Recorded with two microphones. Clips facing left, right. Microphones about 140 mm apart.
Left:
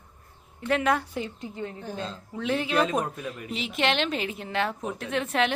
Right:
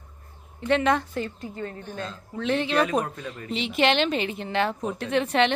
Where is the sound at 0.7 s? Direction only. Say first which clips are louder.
Right 2 dB; 5° left (ahead or behind).